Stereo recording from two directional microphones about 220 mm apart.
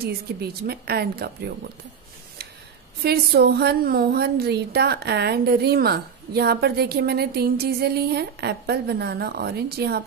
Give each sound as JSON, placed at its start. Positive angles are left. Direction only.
{"t": 0.0, "sound": "a woman's voice", "side_deg": -45}
{"t": 3.0, "sound": "a woman's voice", "side_deg": -45}